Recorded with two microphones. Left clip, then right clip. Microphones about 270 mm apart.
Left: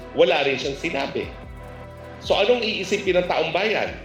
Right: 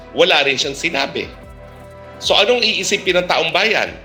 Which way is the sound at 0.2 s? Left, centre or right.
Right.